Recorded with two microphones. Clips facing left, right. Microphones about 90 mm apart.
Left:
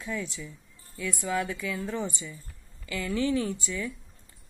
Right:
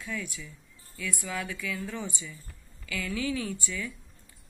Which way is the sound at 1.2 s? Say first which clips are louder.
Left 7 dB; 20° left (ahead or behind).